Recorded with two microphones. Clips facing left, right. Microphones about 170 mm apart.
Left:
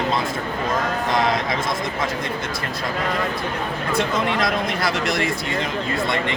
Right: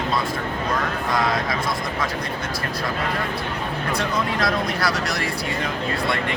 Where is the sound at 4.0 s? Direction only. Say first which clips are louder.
Left 3 dB; 20° left (ahead or behind).